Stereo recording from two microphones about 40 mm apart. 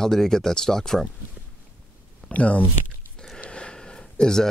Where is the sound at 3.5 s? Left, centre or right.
Left.